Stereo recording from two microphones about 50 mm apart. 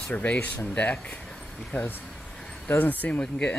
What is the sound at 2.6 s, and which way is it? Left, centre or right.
Speech, left.